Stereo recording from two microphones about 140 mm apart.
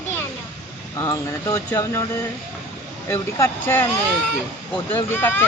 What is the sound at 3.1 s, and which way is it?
Speech, 20° left (ahead or behind).